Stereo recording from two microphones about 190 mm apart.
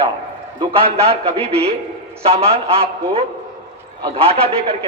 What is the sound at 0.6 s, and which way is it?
A man's voice, 30° right (ahead or behind).